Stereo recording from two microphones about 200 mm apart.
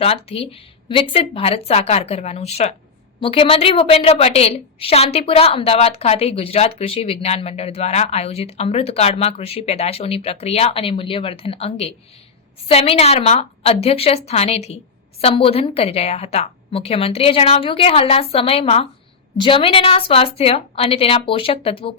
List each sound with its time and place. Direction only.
0.0 s a woman's voice: 30° left (ahead or behind)